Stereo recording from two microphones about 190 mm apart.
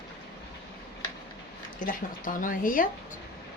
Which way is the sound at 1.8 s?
45° left (ahead or behind).